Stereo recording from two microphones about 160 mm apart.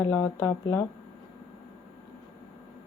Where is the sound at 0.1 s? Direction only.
15° left (ahead or behind).